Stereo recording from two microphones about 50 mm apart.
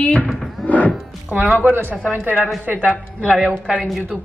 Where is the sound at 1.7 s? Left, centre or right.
Right.